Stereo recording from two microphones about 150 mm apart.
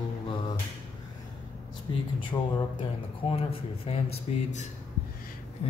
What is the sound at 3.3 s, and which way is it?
Speech, 40° left (ahead or behind).